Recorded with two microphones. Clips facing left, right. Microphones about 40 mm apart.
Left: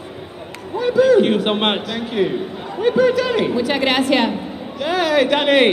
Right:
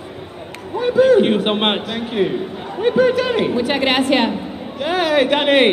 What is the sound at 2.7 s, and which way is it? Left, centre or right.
Speech, right.